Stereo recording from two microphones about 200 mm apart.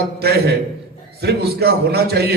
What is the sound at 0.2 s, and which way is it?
A man's voice, 50° right (ahead or behind).